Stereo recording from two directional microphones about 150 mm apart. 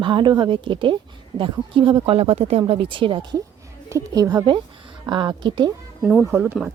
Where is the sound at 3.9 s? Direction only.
25° right (ahead or behind).